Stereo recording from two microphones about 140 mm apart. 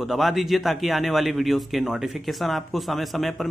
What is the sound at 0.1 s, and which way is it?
Speech, centre (ahead or behind).